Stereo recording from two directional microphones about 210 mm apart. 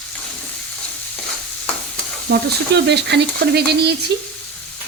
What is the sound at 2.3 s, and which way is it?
Stir, 55° right (ahead or behind).